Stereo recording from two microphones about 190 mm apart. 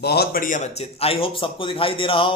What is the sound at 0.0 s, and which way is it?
A man's voice, 55° left (ahead or behind).